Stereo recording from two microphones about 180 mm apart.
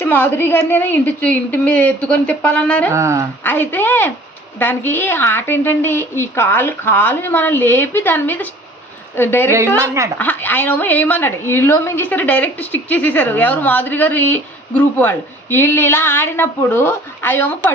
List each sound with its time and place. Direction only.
0.0 s a woman's voice: 10° left (ahead or behind)
2.9 s speech: 15° right (ahead or behind)
3.4 s a woman's voice: 10° left (ahead or behind)
9.8 s speech: 15° right (ahead or behind)
10.2 s a woman's voice: 10° left (ahead or behind)